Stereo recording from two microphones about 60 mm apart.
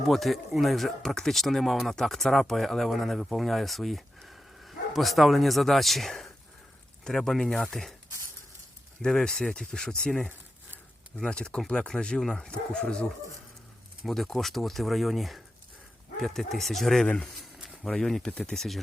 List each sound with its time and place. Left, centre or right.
0.1 s speech: centre
9.0 s speech: centre
14.0 s speech: centre